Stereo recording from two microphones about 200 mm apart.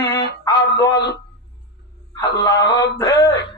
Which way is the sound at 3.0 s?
15° left (ahead or behind).